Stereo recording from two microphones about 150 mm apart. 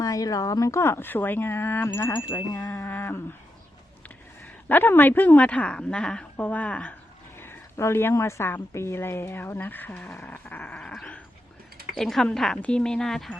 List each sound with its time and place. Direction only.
0.0 s a woman's voice: 25° left (ahead or behind)
4.7 s a woman's voice: 15° left (ahead or behind)